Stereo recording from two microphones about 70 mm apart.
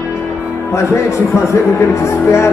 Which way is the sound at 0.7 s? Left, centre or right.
Left.